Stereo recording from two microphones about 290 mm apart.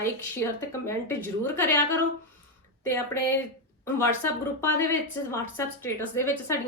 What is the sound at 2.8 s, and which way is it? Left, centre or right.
A woman's voice, centre.